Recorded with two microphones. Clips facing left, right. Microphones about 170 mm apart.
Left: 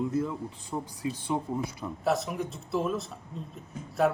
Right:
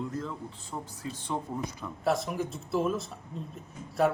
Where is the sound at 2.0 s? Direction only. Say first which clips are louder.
Even; centre (ahead or behind).